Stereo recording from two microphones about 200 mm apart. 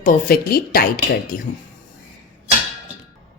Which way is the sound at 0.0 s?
45° left (ahead or behind).